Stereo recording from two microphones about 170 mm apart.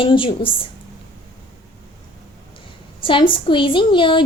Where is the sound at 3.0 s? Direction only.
30° left (ahead or behind).